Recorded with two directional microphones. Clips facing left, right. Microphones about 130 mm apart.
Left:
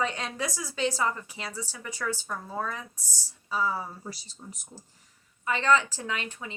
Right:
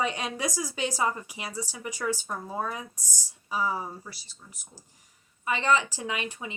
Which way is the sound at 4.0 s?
30° left (ahead or behind).